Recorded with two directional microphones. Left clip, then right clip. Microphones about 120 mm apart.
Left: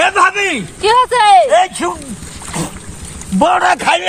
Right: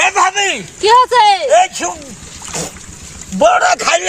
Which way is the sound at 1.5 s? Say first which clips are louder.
Right 1 dB; 15° right (ahead or behind).